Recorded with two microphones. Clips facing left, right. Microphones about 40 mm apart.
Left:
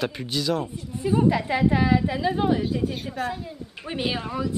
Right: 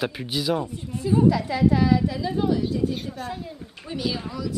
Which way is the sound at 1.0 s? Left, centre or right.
Left.